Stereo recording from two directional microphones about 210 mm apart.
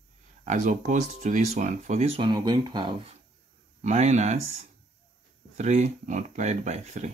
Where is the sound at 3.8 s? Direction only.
35° right (ahead or behind).